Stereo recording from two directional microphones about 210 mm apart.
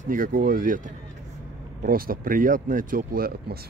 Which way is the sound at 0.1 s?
40° right (ahead or behind).